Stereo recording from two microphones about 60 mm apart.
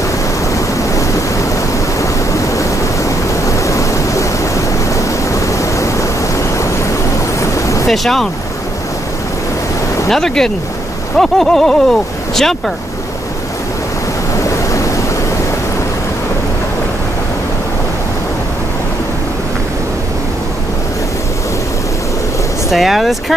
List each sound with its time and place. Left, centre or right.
2.0 s waves: left
7.3 s vehicle: left
7.8 s speech: centre
10.0 s speech: centre
14.7 s a sound: left
22.7 s speech: centre